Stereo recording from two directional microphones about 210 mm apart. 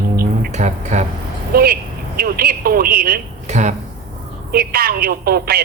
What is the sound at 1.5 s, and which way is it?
Speech, 45° right (ahead or behind).